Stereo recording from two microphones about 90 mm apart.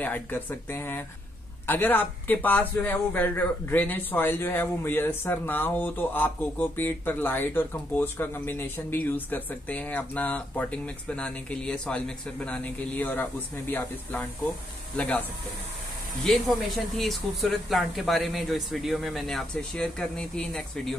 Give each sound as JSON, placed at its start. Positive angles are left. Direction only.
{"t": 0.0, "sound": "a man's voice", "side_deg": 20}
{"t": 16.3, "sound": "speech", "side_deg": 0}